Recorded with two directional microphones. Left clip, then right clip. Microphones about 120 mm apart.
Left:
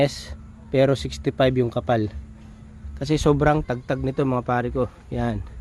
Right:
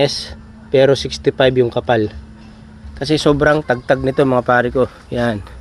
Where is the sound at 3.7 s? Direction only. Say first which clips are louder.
Right 11 dB; 15° left (ahead or behind).